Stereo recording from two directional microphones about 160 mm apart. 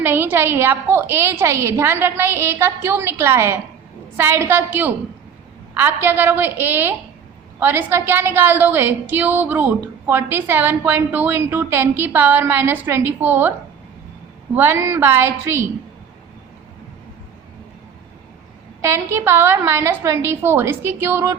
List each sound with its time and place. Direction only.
0.0 s a woman's voice: 10° right (ahead or behind)
14.5 s a woman's voice: 15° right (ahead or behind)
18.8 s a woman's voice: 15° right (ahead or behind)